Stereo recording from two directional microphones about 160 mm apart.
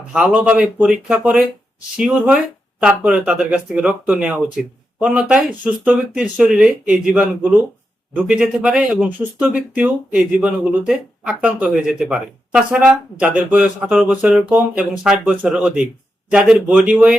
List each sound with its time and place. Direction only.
0.1 s speech: 5° right (ahead or behind)
8.3 s speech: 5° right (ahead or behind)